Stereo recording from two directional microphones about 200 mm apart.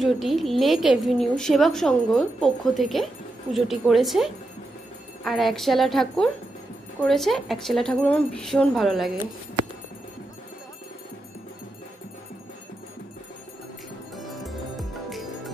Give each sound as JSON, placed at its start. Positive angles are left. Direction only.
{"t": 0.0, "sound": "a woman's voice", "side_deg": 0}
{"t": 14.1, "sound": "music", "side_deg": 0}